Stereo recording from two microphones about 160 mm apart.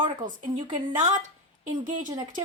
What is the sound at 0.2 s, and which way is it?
Speech, 55° right (ahead or behind).